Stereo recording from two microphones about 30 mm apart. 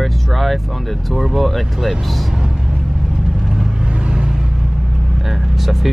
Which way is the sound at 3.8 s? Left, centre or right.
Right.